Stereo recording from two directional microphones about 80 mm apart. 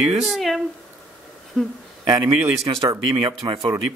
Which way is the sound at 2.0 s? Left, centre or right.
Right.